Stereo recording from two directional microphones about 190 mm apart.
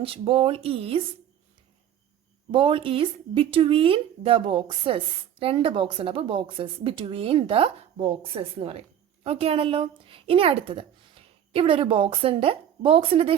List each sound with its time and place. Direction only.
0.0 s speech: 30° right (ahead or behind)
2.5 s a woman's voice: 25° right (ahead or behind)